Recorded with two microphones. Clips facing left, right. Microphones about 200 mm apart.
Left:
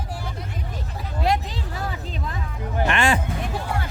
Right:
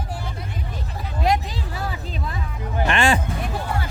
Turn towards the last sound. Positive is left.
turn(degrees=-30)  # may be behind; listen again after turning